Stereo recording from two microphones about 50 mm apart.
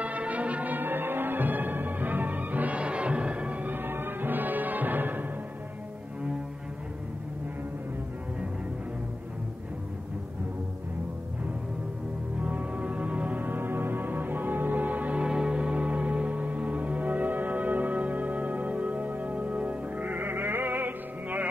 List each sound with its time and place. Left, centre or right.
0.0 s music: right
0.7 s music: right
3.7 s music: right
12.4 s music: right
15.2 s music: centre; by 21.5 s right